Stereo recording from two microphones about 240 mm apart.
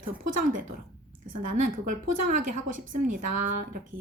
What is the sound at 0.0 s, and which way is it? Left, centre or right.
A woman's voice, right.